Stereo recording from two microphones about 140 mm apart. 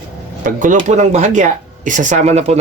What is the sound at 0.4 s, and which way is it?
Speech, 70° right (ahead or behind).